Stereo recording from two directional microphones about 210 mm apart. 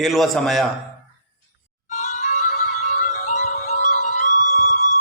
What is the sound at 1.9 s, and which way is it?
Music, 35° left (ahead or behind).